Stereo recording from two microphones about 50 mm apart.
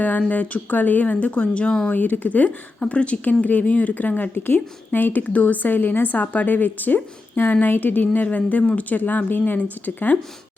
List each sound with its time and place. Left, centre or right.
0.3 s speech: left
1.9 s speech: left